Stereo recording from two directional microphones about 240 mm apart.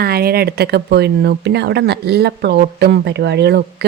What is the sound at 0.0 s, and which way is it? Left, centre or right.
Speech, right.